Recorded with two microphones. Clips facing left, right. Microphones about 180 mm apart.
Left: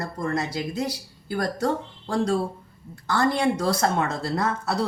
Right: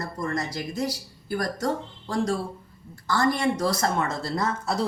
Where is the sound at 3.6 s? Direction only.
60° left (ahead or behind).